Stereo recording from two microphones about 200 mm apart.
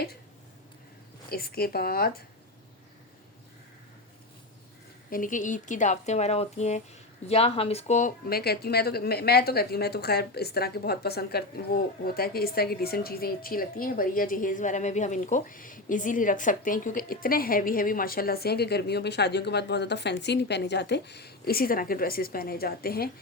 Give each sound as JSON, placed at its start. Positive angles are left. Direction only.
{"t": 1.3, "sound": "speech", "side_deg": 50}
{"t": 5.1, "sound": "speech", "side_deg": 40}